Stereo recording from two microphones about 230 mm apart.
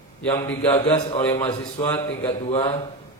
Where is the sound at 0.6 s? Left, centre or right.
Left.